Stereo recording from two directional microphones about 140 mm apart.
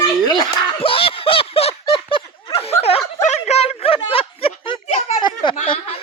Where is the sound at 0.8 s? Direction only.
40° left (ahead or behind).